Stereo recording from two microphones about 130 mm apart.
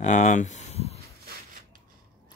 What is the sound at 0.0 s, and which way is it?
Speech, 65° left (ahead or behind).